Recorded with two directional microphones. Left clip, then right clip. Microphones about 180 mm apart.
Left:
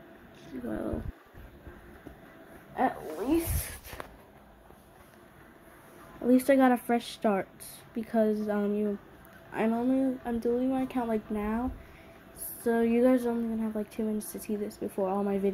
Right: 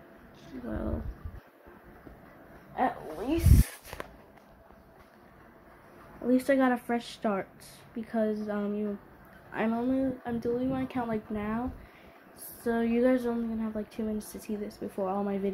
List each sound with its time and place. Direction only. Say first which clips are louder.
0.5 s a sound: left 2 dB; 10° left (ahead or behind)
2.7 s dog: even; 5° left (ahead or behind)
6.2 s a woman's voice: left 2 dB; 15° left (ahead or behind)
9.5 s speech: left 1 dB; centre (ahead or behind)
12.6 s a woman's voice: left 2 dB; 5° left (ahead or behind)